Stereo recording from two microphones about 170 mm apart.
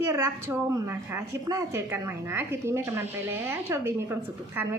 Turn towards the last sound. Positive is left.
turn(degrees=-15)  # may be behind; listen again after turning